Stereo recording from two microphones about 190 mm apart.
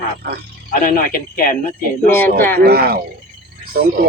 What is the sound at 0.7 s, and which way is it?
Speech, 50° left (ahead or behind).